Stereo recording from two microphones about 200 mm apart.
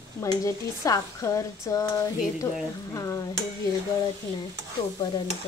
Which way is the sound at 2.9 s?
15° left (ahead or behind).